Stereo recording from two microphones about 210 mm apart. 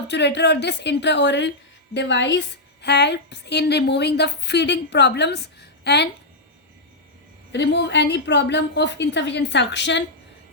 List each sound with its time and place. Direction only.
0.1 s a woman's voice: 55° left (ahead or behind)
7.5 s a woman's voice: 55° left (ahead or behind)